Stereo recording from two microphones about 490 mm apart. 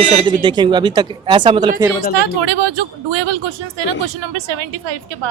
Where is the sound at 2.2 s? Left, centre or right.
Right.